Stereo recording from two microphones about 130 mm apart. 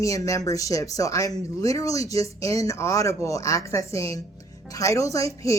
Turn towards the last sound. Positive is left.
turn(degrees=25)  # may be behind; listen again after turning